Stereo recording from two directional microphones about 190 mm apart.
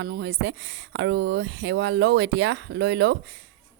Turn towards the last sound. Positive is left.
turn(degrees=-65)  # may be behind; listen again after turning